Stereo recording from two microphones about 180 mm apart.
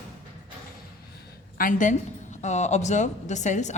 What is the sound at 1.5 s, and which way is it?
A woman's voice, 50° left (ahead or behind).